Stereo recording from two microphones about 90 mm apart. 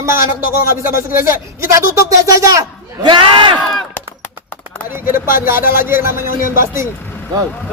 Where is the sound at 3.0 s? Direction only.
60° right (ahead or behind).